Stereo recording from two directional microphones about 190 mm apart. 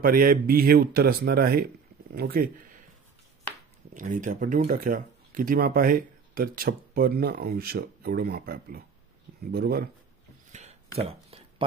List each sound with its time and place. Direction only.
0.0 s speech: 50° right (ahead or behind)
3.9 s speech: 45° right (ahead or behind)
10.5 s a sound: 40° right (ahead or behind)